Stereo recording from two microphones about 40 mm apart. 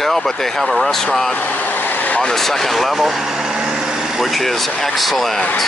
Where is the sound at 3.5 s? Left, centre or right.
Centre.